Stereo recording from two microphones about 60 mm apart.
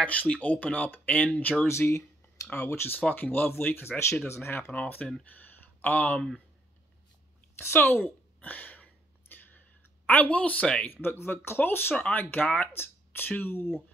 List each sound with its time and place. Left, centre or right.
0.0 s speech: left
1.7 s speech: left
2.4 s speech: left
5.3 s a sound: left
7.5 s speech: left
8.4 s a sound: left
10.0 s speech: left
10.9 s speech: left
12.7 s speech: left